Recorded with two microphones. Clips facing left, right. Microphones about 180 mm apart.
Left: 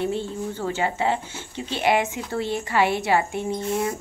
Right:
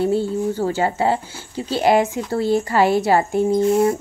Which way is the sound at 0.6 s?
40° right (ahead or behind).